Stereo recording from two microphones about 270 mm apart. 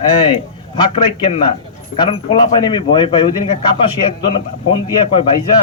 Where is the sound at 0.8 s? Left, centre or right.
Centre.